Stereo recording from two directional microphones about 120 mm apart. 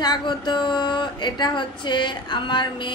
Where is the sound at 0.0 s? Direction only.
40° left (ahead or behind).